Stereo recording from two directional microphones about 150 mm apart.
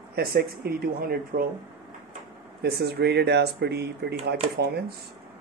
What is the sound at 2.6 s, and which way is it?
Speech, 90° right.